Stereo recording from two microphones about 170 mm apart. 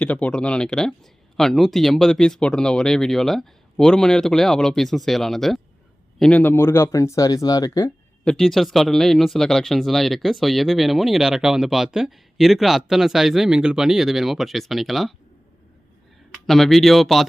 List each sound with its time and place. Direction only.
0.0 s speech: 5° left (ahead or behind)
8.2 s speech: 5° left (ahead or behind)
16.3 s speech: centre (ahead or behind)